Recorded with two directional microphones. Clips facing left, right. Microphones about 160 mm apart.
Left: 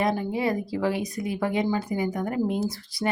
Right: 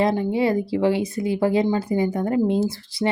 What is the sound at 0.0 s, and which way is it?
Speech, 25° right (ahead or behind).